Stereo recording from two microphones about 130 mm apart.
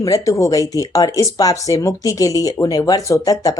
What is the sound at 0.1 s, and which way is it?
Speech, 25° left (ahead or behind).